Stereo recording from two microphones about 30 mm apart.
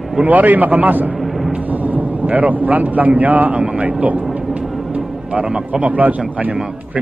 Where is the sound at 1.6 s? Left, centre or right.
Right.